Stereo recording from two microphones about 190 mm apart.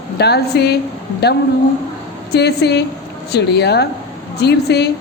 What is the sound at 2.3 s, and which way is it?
Speech, 60° left (ahead or behind).